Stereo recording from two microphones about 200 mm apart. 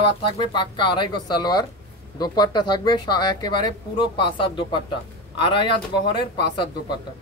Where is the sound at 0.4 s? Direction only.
25° left (ahead or behind).